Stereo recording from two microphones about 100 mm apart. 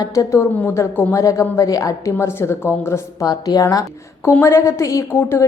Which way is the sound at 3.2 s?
35° left (ahead or behind).